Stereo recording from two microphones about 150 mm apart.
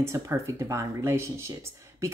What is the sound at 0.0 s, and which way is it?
Speech, 15° right (ahead or behind).